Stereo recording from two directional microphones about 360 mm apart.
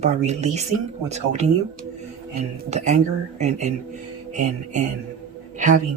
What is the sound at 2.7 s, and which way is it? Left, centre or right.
Speech, centre.